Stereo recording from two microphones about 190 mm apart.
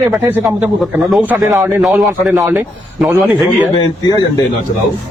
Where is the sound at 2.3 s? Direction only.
10° right (ahead or behind).